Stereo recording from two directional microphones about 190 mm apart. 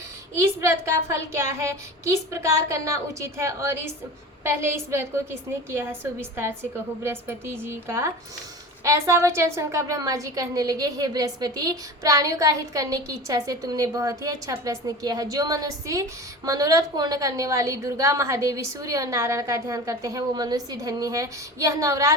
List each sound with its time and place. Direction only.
0.3 s a woman's voice: 15° right (ahead or behind)